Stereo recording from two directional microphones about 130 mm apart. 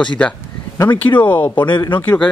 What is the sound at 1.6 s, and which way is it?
Speech, 35° left (ahead or behind).